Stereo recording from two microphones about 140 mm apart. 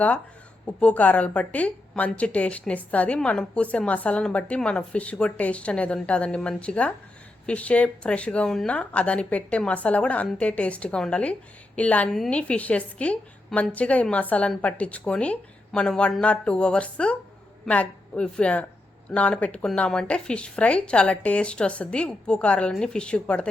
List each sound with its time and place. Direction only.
0.6 s a woman's voice: 10° left (ahead or behind)